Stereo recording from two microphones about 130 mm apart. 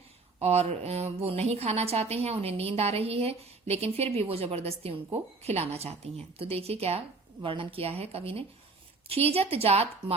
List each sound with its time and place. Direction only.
0.3 s a woman's voice: 55° right (ahead or behind)